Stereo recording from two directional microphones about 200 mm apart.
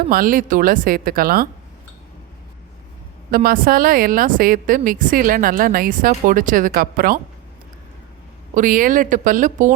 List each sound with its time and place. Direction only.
0.1 s a woman's voice: 45° right (ahead or behind)
3.3 s a woman's voice: 45° right (ahead or behind)
8.5 s speech: 40° right (ahead or behind)